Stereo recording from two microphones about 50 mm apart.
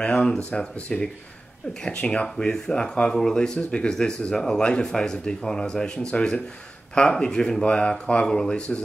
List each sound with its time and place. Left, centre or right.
0.0 s speech: centre